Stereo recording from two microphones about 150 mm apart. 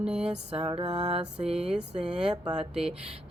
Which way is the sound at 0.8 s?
45° right (ahead or behind).